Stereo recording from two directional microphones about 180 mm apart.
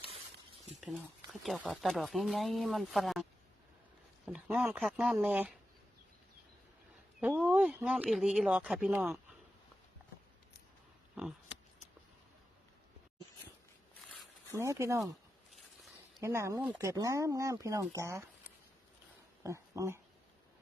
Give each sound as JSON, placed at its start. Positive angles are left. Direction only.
{"t": 0.8, "sound": "speech", "side_deg": 0}
{"t": 4.3, "sound": "speech", "side_deg": -5}
{"t": 7.2, "sound": "speech", "side_deg": -5}
{"t": 11.1, "sound": "a sound", "side_deg": -5}
{"t": 14.5, "sound": "speech", "side_deg": -15}
{"t": 16.2, "sound": "speech", "side_deg": -15}
{"t": 19.4, "sound": "speech", "side_deg": -15}